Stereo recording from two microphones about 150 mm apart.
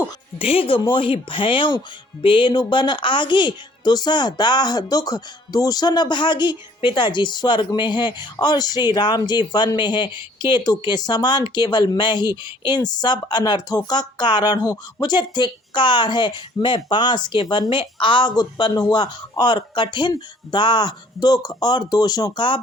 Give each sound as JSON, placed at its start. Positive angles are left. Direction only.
{"t": 0.3, "sound": "speech", "side_deg": 40}